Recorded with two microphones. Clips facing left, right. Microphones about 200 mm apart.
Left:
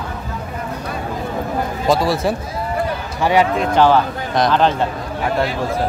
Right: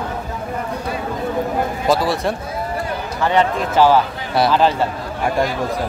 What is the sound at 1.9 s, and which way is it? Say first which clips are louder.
Speech: left 2 dB; centre (ahead or behind).